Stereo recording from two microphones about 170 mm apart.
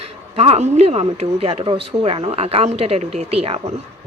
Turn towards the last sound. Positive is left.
turn(degrees=-35)  # may be behind; listen again after turning